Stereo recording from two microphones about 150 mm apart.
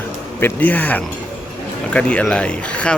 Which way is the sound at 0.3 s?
15° left (ahead or behind).